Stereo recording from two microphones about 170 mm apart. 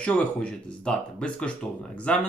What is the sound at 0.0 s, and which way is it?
Speech, 5° left (ahead or behind).